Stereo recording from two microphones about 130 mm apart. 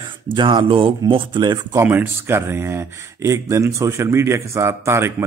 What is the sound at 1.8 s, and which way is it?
Speech, 15° right (ahead or behind).